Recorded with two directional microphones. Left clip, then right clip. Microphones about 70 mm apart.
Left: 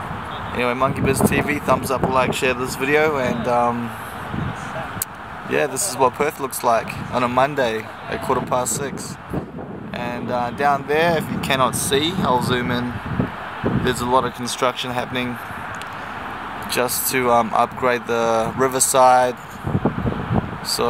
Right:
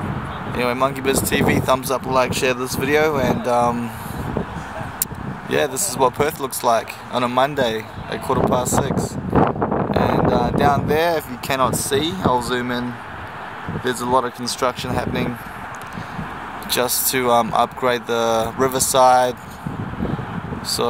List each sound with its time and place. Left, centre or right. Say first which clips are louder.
0.6 s speech: even; right
5.5 s speech: right 1 dB; centre
13.8 s speech: right 1 dB; centre
16.7 s speech: right 1 dB; centre